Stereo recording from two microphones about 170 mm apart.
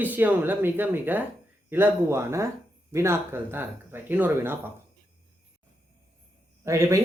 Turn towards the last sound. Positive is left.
turn(degrees=-15)  # may be behind; listen again after turning